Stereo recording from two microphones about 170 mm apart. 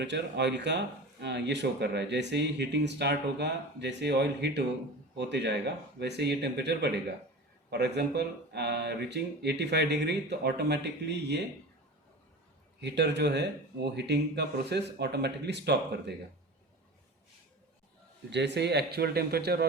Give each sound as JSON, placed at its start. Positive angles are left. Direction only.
{"t": 0.0, "sound": "speech", "side_deg": -90}
{"t": 12.8, "sound": "speech", "side_deg": -80}
{"t": 18.3, "sound": "speech", "side_deg": -90}